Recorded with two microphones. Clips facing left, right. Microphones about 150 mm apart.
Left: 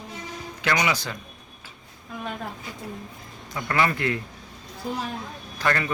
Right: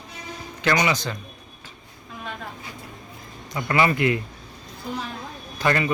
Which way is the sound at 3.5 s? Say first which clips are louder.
Right 3 dB; 10° right (ahead or behind).